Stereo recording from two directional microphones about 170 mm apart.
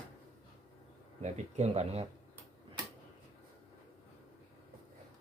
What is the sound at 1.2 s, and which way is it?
Speech, 40° right (ahead or behind).